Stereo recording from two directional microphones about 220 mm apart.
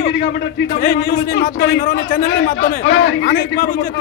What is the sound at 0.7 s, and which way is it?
A man's voice, 45° left (ahead or behind).